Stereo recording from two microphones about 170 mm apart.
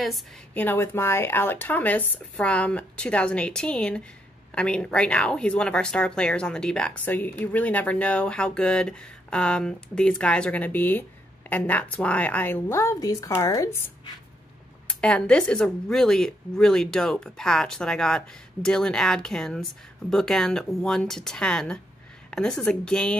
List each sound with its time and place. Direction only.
0.6 s speech: 10° left (ahead or behind)
14.9 s speech: 5° left (ahead or behind)